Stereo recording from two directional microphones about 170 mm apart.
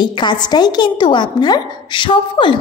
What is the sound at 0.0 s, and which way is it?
A woman's voice, 25° left (ahead or behind).